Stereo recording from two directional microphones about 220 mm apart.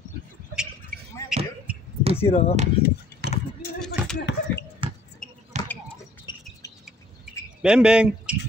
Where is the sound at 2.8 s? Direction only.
25° left (ahead or behind).